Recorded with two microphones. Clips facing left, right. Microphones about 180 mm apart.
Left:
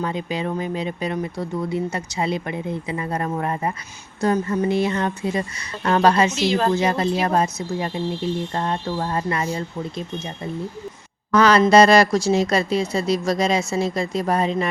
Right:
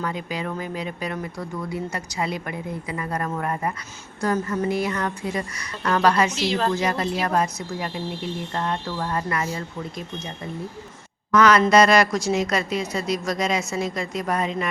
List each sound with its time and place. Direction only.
0.0 s speech: 25° left (ahead or behind)
11.3 s speech: 30° left (ahead or behind)